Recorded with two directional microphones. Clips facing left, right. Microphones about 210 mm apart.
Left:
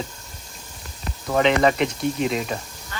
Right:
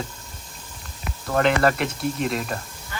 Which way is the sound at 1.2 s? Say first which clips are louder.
Left 1 dB; centre (ahead or behind).